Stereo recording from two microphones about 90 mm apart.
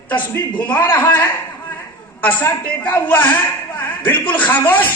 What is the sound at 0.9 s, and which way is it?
A man's voice, 20° left (ahead or behind).